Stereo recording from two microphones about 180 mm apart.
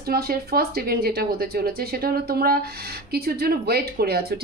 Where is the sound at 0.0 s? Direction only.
60° right (ahead or behind).